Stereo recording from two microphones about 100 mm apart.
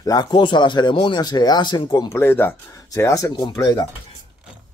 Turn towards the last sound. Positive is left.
turn(degrees=30)  # may be behind; listen again after turning